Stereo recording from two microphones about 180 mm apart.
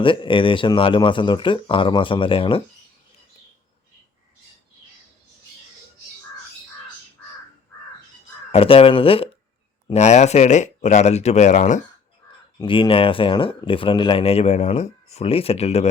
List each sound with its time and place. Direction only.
0.0 s speech: 30° left (ahead or behind)
8.5 s speech: 30° left (ahead or behind)
12.5 s speech: 30° left (ahead or behind)